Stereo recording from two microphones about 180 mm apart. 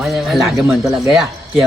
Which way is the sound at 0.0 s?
Centre (ahead or behind).